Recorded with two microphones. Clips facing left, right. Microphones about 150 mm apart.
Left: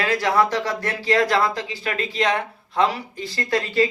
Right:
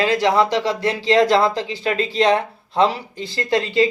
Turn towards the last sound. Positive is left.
turn(degrees=-25)  # may be behind; listen again after turning